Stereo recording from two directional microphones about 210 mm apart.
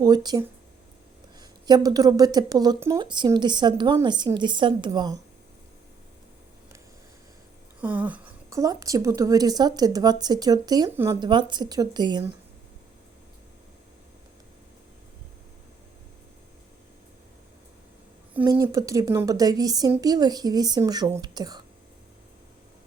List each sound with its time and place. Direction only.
0.0 s speech: 20° right (ahead or behind)
7.8 s a woman's voice: 5° right (ahead or behind)
18.3 s a woman's voice: 10° right (ahead or behind)